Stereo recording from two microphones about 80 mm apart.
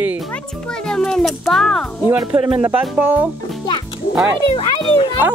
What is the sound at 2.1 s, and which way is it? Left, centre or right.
Speech, centre.